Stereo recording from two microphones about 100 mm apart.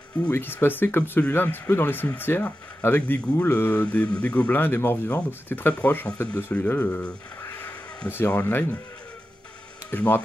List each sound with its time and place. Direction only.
0.3 s speech: 20° left (ahead or behind)
7.4 s music: 20° left (ahead or behind)
9.8 s speech: 15° left (ahead or behind)